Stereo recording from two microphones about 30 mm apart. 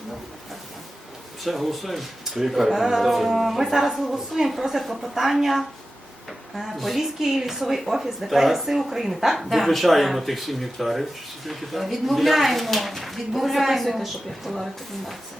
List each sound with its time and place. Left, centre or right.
1.5 s speech: centre